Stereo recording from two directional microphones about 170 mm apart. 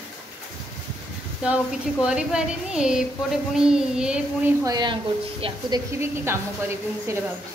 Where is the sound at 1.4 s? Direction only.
5° right (ahead or behind).